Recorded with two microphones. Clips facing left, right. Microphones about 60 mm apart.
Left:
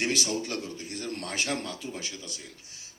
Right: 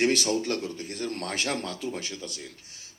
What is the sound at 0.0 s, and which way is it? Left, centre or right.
A man's voice, right.